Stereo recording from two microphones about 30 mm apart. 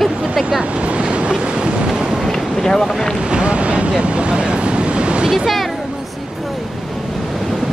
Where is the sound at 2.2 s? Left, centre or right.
Centre.